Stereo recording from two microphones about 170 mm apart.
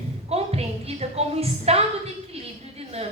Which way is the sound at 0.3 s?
35° right (ahead or behind).